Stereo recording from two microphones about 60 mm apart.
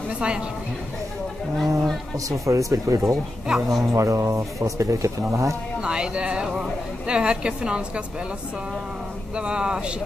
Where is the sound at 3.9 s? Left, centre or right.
Right.